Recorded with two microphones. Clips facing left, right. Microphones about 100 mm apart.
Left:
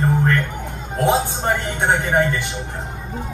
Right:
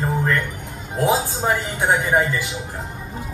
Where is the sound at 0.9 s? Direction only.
5° right (ahead or behind).